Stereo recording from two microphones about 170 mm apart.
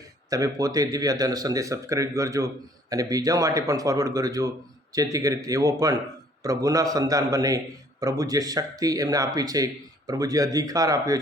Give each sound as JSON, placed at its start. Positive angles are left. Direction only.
{"t": 0.3, "sound": "a man's voice", "side_deg": -20}